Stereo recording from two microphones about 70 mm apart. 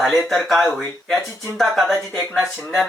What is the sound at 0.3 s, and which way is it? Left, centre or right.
Speech, centre.